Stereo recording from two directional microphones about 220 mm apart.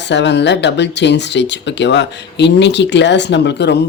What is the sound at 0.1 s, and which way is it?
Speech, 55° left (ahead or behind).